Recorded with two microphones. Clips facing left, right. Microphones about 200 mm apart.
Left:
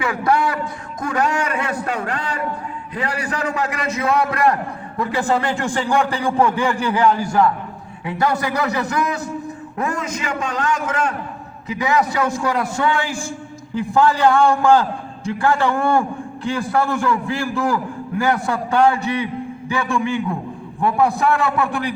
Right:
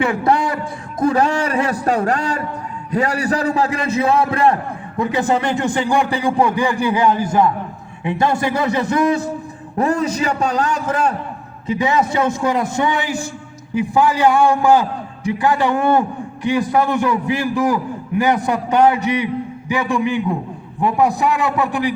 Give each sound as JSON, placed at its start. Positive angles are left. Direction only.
{"t": 0.0, "sound": "a sound", "side_deg": -30}
{"t": 2.9, "sound": "a man's voice", "side_deg": -40}
{"t": 11.7, "sound": "a man's voice", "side_deg": -25}